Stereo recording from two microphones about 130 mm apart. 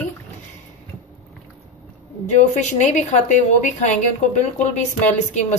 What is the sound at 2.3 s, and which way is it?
A woman's voice, 65° left (ahead or behind).